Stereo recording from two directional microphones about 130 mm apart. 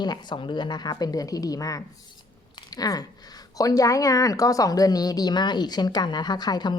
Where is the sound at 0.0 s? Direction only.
35° left (ahead or behind).